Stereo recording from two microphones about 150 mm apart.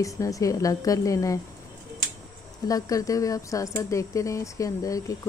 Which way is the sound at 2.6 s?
25° left (ahead or behind).